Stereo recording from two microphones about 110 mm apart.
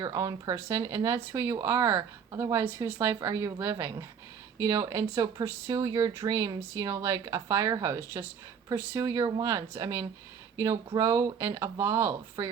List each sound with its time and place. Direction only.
0.0 s speech: 35° right (ahead or behind)